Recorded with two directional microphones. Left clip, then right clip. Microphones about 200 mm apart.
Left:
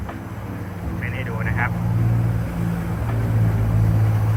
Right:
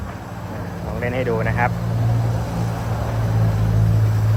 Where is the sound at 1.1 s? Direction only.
15° right (ahead or behind).